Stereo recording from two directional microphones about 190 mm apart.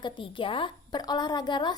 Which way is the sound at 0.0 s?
25° left (ahead or behind).